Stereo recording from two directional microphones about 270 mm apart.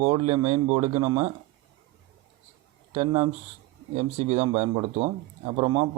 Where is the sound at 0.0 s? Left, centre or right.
Right.